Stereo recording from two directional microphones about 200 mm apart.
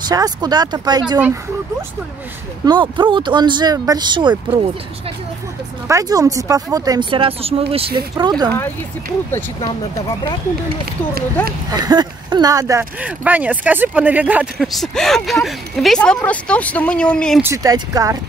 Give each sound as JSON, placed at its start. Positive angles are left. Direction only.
{"t": 0.1, "sound": "speech", "side_deg": -20}
{"t": 2.6, "sound": "speech", "side_deg": -20}
{"t": 5.9, "sound": "speech", "side_deg": -15}
{"t": 11.7, "sound": "speech", "side_deg": -20}
{"t": 17.4, "sound": "speech", "side_deg": -15}